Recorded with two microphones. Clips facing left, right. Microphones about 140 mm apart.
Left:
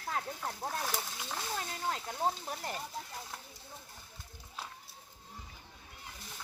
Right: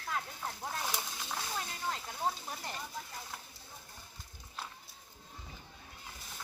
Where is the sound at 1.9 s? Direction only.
45° left (ahead or behind).